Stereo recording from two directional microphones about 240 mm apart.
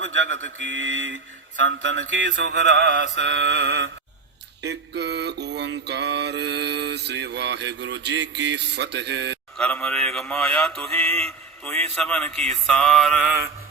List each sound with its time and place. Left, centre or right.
0.0 s mantra: right
9.6 s mantra: centre